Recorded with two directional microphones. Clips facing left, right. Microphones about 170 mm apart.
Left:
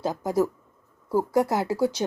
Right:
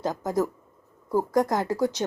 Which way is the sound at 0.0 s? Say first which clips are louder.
Left 2 dB; 10° left (ahead or behind).